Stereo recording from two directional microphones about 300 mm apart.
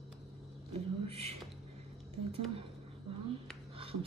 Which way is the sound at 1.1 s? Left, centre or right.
Centre.